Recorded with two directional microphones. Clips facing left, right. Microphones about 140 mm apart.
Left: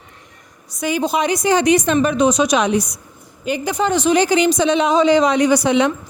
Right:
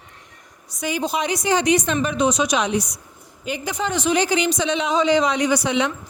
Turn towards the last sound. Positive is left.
turn(degrees=45)  # may be behind; listen again after turning